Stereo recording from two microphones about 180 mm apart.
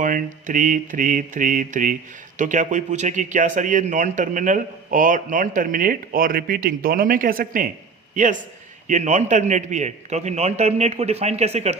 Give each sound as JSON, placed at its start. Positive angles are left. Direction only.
{"t": 0.0, "sound": "a man's voice", "side_deg": -45}